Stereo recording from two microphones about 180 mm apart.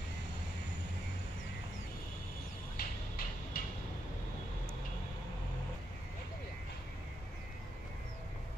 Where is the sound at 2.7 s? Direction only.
55° left (ahead or behind).